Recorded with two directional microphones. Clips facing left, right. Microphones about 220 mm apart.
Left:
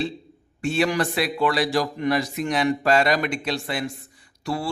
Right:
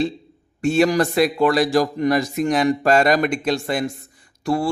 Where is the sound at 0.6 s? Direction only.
45° right (ahead or behind).